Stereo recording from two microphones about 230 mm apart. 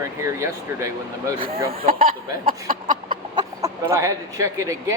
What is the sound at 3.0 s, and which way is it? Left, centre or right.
Chicken, centre.